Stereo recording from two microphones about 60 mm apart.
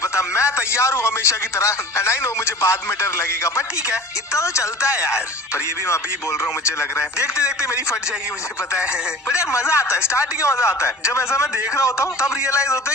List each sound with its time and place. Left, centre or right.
0.0 s a man's voice: left
6.7 s a man's voice: left
9.3 s a man's voice: left